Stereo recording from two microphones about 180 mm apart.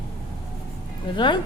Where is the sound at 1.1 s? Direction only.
25° left (ahead or behind).